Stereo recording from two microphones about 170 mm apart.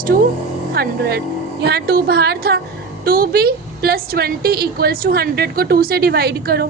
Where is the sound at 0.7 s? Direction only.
70° right (ahead or behind).